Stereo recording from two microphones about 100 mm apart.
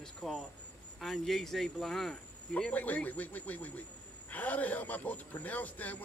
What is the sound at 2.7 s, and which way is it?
Speech, 15° left (ahead or behind).